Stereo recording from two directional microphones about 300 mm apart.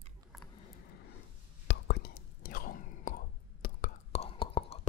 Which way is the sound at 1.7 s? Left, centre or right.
Left.